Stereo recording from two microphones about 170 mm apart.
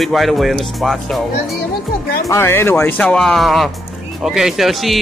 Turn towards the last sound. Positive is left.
turn(degrees=0)  # may be behind; listen again after turning